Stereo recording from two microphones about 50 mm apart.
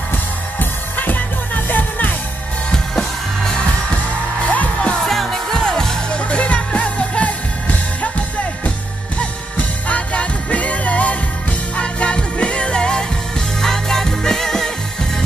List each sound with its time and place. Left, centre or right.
0.1 s music: left
2.7 s music: centre
4.5 s music: left
5.0 s music: centre